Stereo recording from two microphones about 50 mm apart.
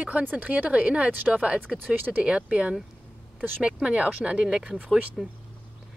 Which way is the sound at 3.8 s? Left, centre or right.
Right.